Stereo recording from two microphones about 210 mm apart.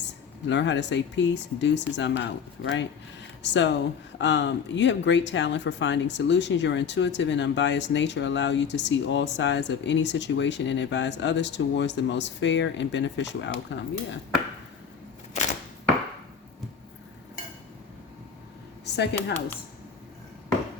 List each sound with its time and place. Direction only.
0.4 s speech: 60° left (ahead or behind)
15.3 s camera: 35° left (ahead or behind)